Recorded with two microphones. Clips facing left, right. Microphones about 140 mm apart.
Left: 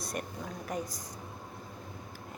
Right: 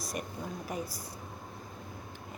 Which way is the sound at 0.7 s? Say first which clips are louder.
Left 2 dB; 5° right (ahead or behind).